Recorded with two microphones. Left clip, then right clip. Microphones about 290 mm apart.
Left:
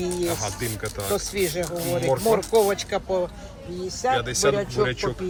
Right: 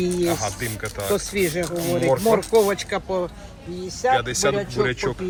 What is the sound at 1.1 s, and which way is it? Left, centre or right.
Speech, right.